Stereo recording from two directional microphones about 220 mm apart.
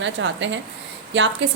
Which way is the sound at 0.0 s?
55° right (ahead or behind).